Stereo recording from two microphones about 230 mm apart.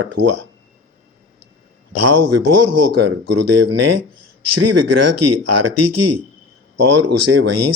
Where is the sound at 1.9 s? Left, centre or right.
Right.